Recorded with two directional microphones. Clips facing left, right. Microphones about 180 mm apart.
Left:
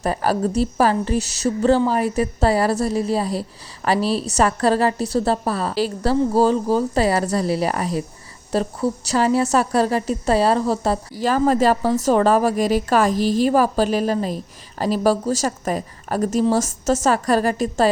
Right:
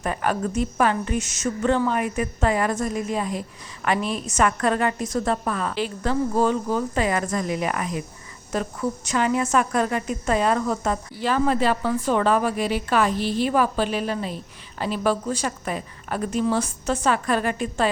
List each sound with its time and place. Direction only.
0.0 s a woman's voice: 35° left (ahead or behind)